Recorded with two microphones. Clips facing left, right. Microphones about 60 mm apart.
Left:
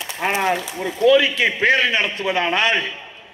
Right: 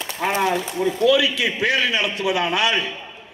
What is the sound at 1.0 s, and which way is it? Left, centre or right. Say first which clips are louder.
A man's voice: left 4 dB; left.